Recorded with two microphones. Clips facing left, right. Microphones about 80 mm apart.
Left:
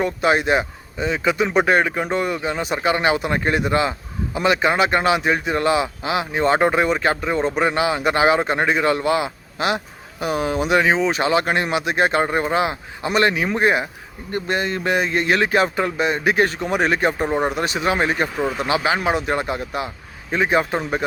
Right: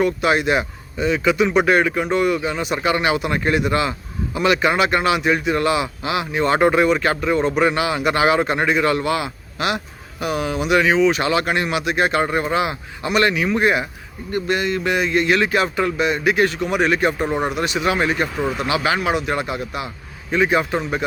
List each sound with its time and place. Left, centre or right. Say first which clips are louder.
0.0 s speech: right 1 dB; left
17.2 s speech: left 1 dB; centre
17.5 s speech: right 1 dB; left
18.3 s speech: even; centre
18.7 s speech: even; left